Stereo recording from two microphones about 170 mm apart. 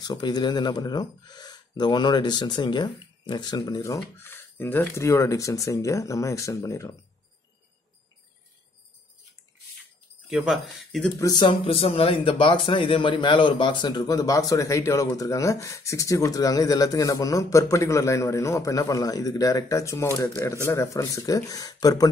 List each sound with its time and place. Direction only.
0.0 s a man's voice: 25° left (ahead or behind)
10.3 s speech: 5° right (ahead or behind)
11.1 s a man's voice: 25° left (ahead or behind)